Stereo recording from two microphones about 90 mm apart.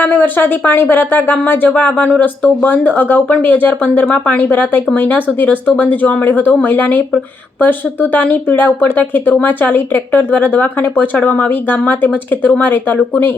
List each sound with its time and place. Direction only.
0.0 s speech: 20° left (ahead or behind)